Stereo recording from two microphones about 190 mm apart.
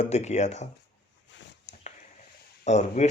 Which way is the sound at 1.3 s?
70° left (ahead or behind).